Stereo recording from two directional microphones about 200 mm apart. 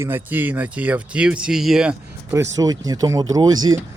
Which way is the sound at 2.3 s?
15° right (ahead or behind).